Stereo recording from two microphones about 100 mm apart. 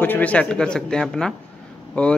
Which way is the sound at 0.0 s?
15° left (ahead or behind).